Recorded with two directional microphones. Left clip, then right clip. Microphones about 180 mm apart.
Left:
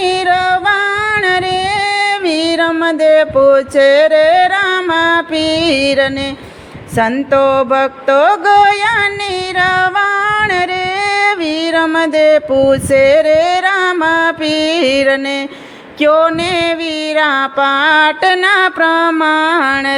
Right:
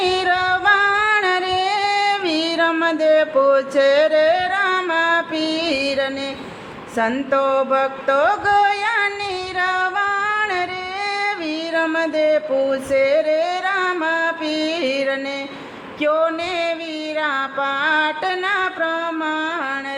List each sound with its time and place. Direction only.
0.0 s music: 30° left (ahead or behind)
6.9 s mantra: 45° left (ahead or behind)
9.6 s singing: 45° left (ahead or behind)
16.0 s mantra: 50° left (ahead or behind)
17.2 s music: 55° left (ahead or behind)